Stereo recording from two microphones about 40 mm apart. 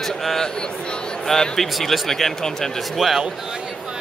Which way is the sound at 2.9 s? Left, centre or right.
Centre.